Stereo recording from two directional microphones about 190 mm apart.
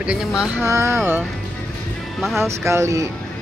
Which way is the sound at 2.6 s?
15° right (ahead or behind).